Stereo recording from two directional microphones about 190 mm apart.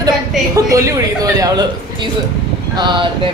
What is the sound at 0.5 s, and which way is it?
A woman's voice, 15° right (ahead or behind).